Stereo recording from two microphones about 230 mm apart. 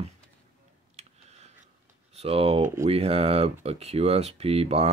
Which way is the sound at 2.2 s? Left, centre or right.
Right.